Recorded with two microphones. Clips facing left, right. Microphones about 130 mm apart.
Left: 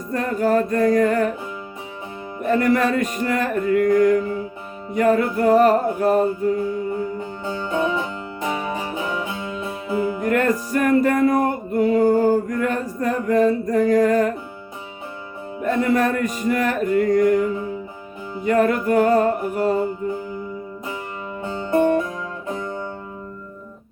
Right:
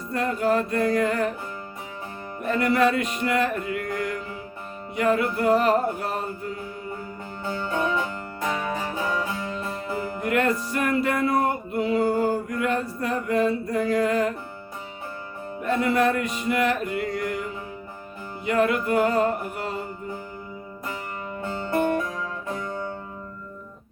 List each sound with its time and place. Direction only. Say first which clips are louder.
0.1 s music: left 4 dB; 45° left (ahead or behind)
2.4 s music: left 3 dB; 45° left (ahead or behind)
7.4 s music: left 3 dB; 20° left (ahead or behind)
10.2 s music: even; 45° left (ahead or behind)
15.6 s music: left 3 dB; 45° left (ahead or behind)
18.4 s music: left 4 dB; 45° left (ahead or behind)
21.4 s music: left 6 dB; 20° left (ahead or behind)